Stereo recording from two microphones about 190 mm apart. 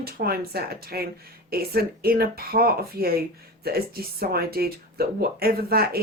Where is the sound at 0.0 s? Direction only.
55° right (ahead or behind).